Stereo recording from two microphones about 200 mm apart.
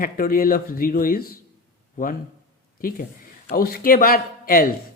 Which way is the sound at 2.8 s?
45° left (ahead or behind).